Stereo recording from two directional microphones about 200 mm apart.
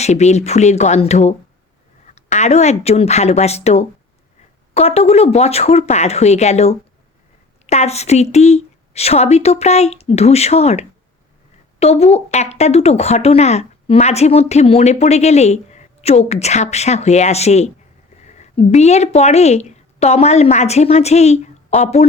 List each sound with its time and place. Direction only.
0.0 s a woman's voice: 35° left (ahead or behind)